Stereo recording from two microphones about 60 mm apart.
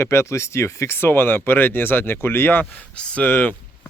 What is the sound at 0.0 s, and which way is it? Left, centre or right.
Speech, left.